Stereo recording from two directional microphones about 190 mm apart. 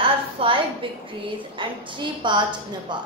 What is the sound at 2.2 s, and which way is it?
Speech, 25° right (ahead or behind).